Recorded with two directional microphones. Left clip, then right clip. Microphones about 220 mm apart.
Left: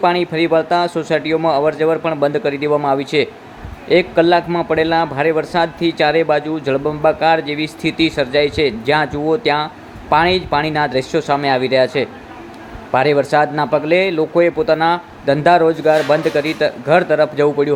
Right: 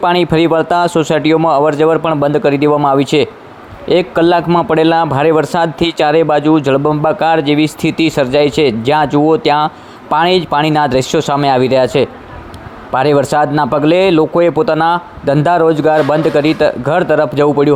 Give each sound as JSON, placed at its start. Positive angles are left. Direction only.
{"t": 0.0, "sound": "a man's voice", "side_deg": -30}